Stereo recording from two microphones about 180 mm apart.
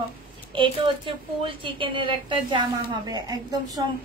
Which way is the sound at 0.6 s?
30° right (ahead or behind).